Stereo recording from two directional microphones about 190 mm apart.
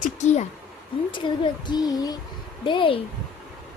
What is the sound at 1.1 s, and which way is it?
A woman's voice, 25° left (ahead or behind).